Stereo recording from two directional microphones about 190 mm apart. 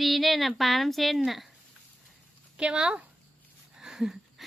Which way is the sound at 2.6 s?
5° right (ahead or behind).